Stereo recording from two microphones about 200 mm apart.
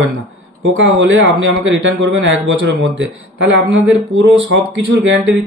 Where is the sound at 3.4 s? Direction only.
70° right (ahead or behind).